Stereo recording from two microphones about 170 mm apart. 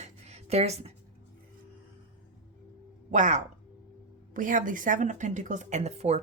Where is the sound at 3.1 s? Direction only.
45° right (ahead or behind).